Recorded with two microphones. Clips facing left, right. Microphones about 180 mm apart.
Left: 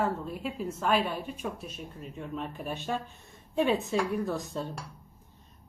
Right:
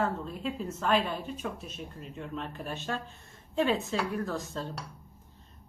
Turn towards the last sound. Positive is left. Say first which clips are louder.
# left 2 dB
turn(degrees=15)  # may be behind; listen again after turning